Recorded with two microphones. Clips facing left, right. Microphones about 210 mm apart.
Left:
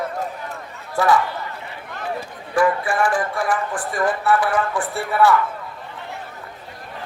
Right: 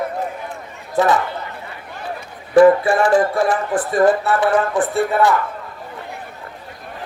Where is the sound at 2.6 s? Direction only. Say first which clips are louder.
Right 8 dB; 25° right (ahead or behind).